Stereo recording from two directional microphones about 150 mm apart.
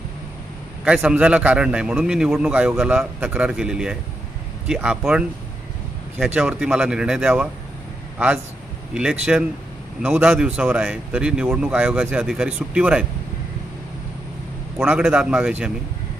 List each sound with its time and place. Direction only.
0.9 s a man's voice: 10° right (ahead or behind)
8.9 s a man's voice: 5° right (ahead or behind)
14.8 s speech: 5° right (ahead or behind)